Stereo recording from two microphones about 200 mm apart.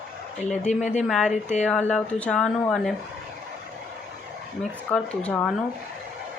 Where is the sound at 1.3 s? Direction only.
35° left (ahead or behind).